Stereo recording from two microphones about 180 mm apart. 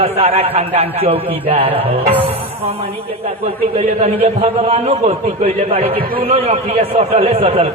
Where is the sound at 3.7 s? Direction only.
35° right (ahead or behind).